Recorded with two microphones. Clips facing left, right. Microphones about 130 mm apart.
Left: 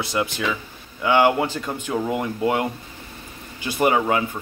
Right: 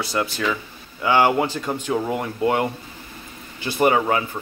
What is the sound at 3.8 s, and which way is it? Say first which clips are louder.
Speech: right 1 dB; 5° left (ahead or behind).